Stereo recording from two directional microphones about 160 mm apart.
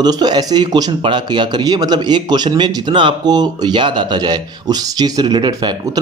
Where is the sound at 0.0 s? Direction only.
25° right (ahead or behind).